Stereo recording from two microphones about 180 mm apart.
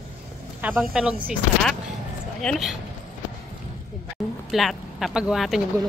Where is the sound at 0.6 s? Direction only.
5° right (ahead or behind).